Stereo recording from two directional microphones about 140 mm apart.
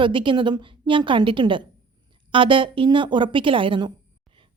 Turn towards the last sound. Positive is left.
turn(degrees=-35)  # may be behind; listen again after turning